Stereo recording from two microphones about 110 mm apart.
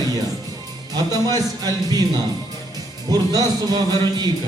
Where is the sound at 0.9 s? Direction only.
35° right (ahead or behind).